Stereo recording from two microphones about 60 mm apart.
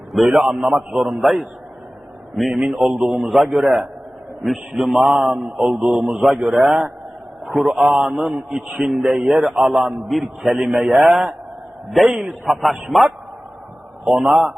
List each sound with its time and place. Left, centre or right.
0.1 s a man's voice: centre
6.4 s a man's voice: centre
7.4 s a man's voice: centre
10.8 s a man's voice: right
11.0 s a man's voice: centre
14.2 s a man's voice: centre